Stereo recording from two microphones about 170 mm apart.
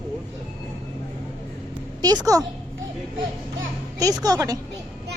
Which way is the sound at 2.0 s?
25° right (ahead or behind).